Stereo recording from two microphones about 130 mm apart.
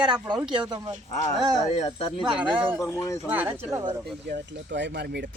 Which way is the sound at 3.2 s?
15° right (ahead or behind).